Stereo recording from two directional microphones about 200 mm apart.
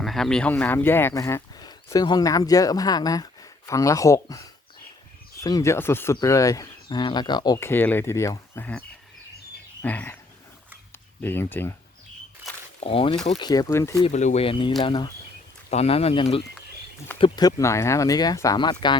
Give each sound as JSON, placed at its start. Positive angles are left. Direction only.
{"t": 0.0, "sound": "speech", "side_deg": 0}
{"t": 9.8, "sound": "speech", "side_deg": 10}
{"t": 11.2, "sound": "speech", "side_deg": 10}
{"t": 12.8, "sound": "speech", "side_deg": 25}
{"t": 14.0, "sound": "speech", "side_deg": 35}